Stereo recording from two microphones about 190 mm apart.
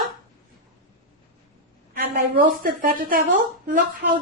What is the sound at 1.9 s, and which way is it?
A woman's voice, 50° right (ahead or behind).